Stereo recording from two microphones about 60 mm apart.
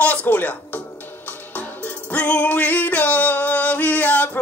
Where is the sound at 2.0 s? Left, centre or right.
Left.